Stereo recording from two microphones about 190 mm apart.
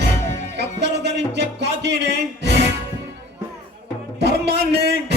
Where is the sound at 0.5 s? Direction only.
65° right (ahead or behind).